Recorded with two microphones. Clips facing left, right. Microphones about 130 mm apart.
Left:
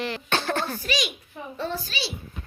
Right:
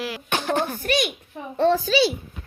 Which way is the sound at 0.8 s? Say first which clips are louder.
Right 5 dB; 55° right (ahead or behind).